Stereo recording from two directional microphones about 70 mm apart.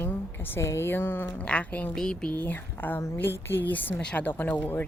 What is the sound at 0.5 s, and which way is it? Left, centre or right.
A woman's voice, left.